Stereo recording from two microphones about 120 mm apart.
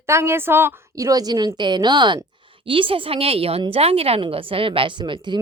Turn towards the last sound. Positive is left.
turn(degrees=-40)  # may be behind; listen again after turning